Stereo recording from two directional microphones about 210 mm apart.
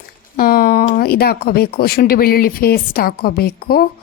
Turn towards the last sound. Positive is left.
turn(degrees=45)  # may be behind; listen again after turning